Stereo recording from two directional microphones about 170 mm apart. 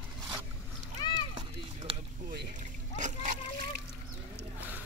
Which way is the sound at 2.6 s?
45° right (ahead or behind).